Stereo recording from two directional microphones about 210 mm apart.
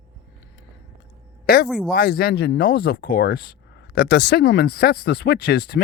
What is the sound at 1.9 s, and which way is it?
Speech, 45° left (ahead or behind).